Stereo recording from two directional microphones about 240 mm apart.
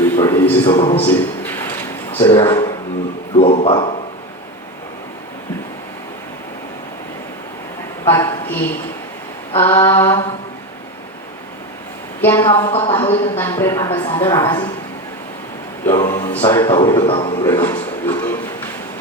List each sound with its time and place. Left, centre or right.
0.0 s a sound: centre
2.4 s a man's voice: centre
3.3 s a sound: left
8.1 s a man's voice: centre
12.2 s a man's voice: centre
12.5 s speech: left
13.0 s a man's voice: centre
15.9 s a man's voice: centre
17.4 s speech: centre